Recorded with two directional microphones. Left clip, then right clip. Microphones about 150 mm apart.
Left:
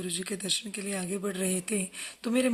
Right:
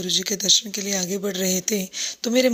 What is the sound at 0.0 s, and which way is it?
Speech, 30° right (ahead or behind).